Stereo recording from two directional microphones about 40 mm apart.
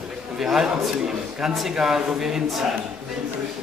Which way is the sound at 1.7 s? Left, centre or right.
Centre.